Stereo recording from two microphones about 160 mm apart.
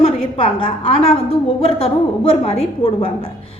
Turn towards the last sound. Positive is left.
turn(degrees=35)  # may be behind; listen again after turning